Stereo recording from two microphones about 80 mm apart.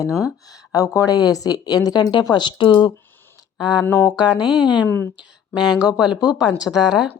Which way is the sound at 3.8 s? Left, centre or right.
Left.